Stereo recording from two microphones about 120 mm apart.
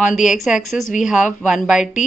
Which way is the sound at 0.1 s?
90° left.